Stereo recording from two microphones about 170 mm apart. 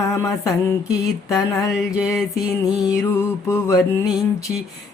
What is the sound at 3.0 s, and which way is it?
Mantra, 15° left (ahead or behind).